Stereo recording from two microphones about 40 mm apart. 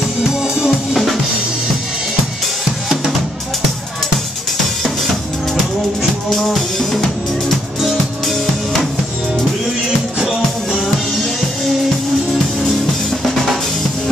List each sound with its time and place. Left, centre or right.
0.3 s music: centre
6.3 s music: centre